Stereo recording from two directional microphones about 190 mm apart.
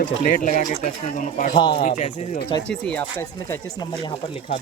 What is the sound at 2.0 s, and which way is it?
Speech, 40° left (ahead or behind).